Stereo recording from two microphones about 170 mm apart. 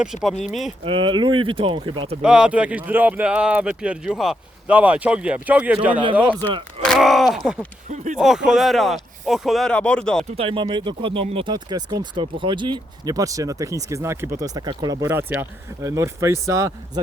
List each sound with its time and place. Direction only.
0.0 s speech: centre (ahead or behind)
0.9 s speech: 30° right (ahead or behind)
2.2 s speech: 5° right (ahead or behind)
7.9 s speech: 45° right (ahead or behind)
8.4 s speech: centre (ahead or behind)
10.3 s speech: 30° right (ahead or behind)